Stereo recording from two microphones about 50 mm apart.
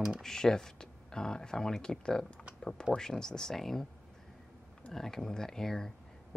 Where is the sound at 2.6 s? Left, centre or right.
Centre.